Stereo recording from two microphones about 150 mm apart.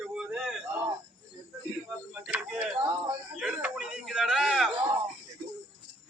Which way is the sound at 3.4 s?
10° right (ahead or behind).